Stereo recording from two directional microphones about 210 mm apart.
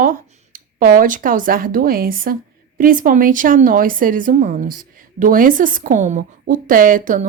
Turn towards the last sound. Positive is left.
turn(degrees=-40)  # may be behind; listen again after turning